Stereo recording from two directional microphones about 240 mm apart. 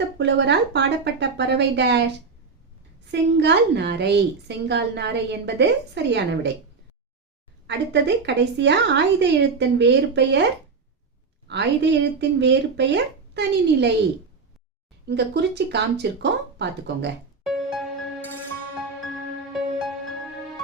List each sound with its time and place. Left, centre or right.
0.2 s a woman's voice: right
3.1 s a woman's voice: right
7.7 s a woman's voice: right
11.4 s a woman's voice: right
15.0 s a woman's voice: right
17.4 s music: centre